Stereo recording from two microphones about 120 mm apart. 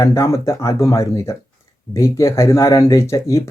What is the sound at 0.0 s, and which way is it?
Speech, 25° left (ahead or behind).